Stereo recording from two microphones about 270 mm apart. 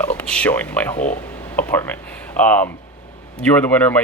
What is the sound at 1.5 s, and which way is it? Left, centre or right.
Speech, centre.